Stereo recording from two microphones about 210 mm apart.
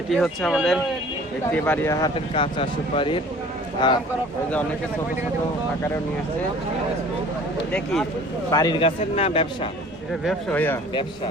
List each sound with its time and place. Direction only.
0.1 s speech: centre (ahead or behind); by 4.0 s 20° left (ahead or behind)
8.4 s speech: 15° left (ahead or behind)
10.1 s speech: 5° left (ahead or behind)